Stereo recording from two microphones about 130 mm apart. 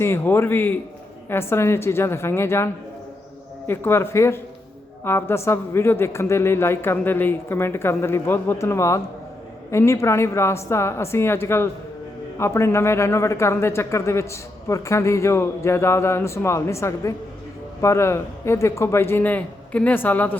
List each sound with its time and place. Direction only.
0.0 s a man's voice: 20° left (ahead or behind)
3.7 s a man's voice: 20° left (ahead or behind)